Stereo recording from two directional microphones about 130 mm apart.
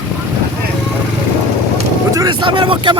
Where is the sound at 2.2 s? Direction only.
40° right (ahead or behind).